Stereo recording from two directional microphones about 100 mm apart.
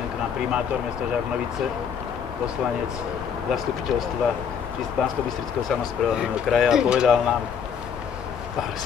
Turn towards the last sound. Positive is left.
turn(degrees=-5)  # may be behind; listen again after turning